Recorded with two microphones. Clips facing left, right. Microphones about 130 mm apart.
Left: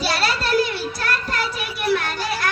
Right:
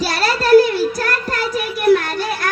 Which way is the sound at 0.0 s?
40° right (ahead or behind).